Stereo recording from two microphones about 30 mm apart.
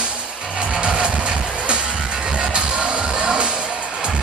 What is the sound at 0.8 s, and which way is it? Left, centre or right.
Vehicle, right.